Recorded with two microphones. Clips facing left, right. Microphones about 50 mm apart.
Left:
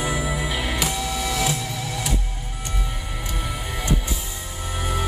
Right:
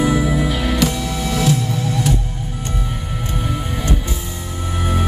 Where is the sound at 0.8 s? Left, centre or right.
Right.